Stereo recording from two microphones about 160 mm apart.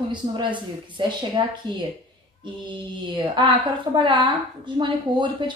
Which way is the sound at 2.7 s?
30° right (ahead or behind).